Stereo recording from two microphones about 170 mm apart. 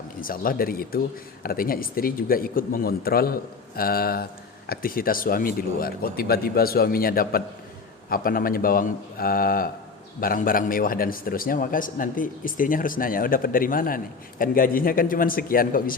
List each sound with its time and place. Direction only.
0.2 s a man's voice: 55° left (ahead or behind)